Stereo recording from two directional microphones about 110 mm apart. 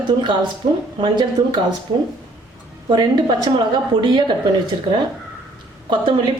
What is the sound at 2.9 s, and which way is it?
A woman's voice, 40° right (ahead or behind).